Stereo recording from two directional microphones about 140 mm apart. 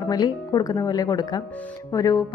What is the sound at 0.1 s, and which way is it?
Speech, 30° left (ahead or behind).